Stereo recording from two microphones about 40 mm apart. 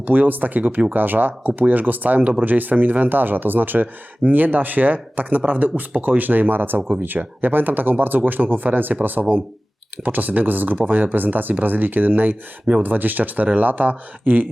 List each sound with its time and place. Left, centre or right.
0.0 s speech: right